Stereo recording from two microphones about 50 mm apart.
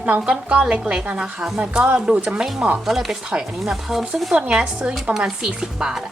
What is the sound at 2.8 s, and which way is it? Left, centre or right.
Speech, centre.